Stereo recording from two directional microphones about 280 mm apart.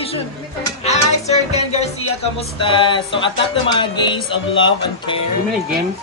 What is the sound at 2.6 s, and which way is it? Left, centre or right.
Speech, centre.